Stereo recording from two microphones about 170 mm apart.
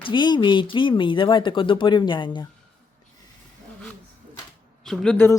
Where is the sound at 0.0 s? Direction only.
25° left (ahead or behind).